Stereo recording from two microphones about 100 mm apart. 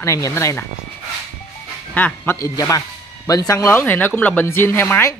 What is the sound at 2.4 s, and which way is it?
Speech, 35° left (ahead or behind).